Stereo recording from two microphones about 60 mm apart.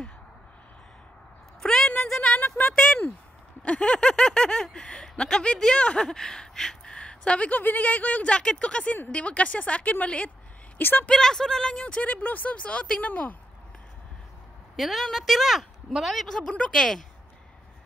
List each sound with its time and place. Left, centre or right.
1.6 s a sound: centre
2.5 s a sound: left
3.6 s a woman's voice: centre
10.8 s speech: left
11.1 s speech: centre
12.1 s a woman's voice: left
13.0 s a woman's voice: left
14.8 s a woman's voice: centre